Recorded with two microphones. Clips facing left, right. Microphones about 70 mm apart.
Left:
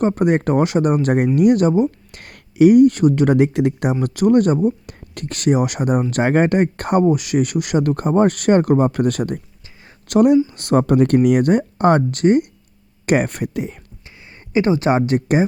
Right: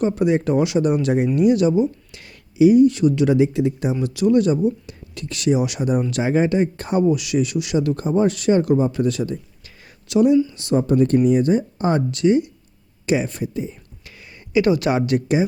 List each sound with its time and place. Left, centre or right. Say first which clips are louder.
0.0 s speech: left 2 dB; left
1.0 s speech: left 2 dB; left
4.0 s speech: left 2 dB; left
7.0 s speech: even; left
14.0 s speech: even; left